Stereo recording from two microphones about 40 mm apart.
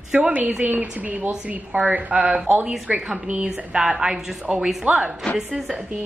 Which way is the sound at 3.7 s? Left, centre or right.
Right.